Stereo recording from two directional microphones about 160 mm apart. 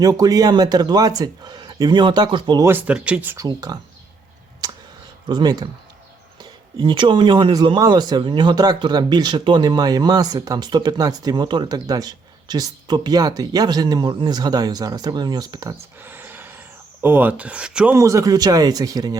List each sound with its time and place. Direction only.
0.0 s speech: 20° right (ahead or behind)
2.6 s speech: 10° right (ahead or behind)
4.6 s a sound: 25° right (ahead or behind)
5.3 s speech: 25° right (ahead or behind)
16.0 s gasp: 10° right (ahead or behind)
17.9 s speech: 20° right (ahead or behind)